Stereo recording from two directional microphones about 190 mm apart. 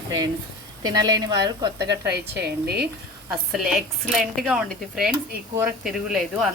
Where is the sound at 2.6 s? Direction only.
55° right (ahead or behind).